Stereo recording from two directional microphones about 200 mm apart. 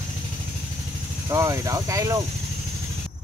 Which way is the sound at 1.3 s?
15° right (ahead or behind).